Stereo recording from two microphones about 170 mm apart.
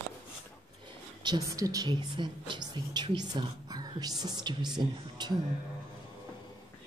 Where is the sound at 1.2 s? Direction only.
20° right (ahead or behind).